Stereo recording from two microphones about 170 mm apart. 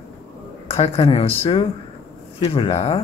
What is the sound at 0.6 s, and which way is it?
Speech, 35° left (ahead or behind).